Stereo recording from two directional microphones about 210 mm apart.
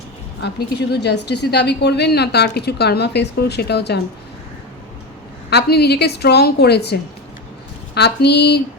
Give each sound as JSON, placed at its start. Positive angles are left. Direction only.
{"t": 0.4, "sound": "a woman's voice", "side_deg": 50}
{"t": 5.5, "sound": "a woman's voice", "side_deg": 50}